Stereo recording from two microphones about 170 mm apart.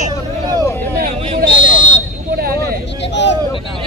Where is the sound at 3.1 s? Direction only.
90° left.